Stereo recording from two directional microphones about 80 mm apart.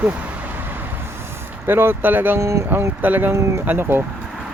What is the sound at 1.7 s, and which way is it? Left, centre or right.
Speech, right.